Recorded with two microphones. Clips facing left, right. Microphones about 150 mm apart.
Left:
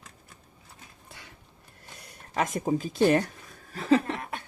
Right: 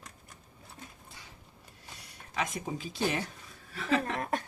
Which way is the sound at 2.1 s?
50° left (ahead or behind).